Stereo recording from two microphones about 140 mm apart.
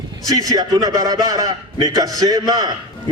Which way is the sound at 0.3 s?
25° right (ahead or behind).